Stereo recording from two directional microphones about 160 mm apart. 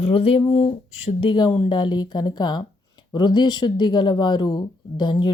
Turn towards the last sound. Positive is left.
turn(degrees=30)  # may be behind; listen again after turning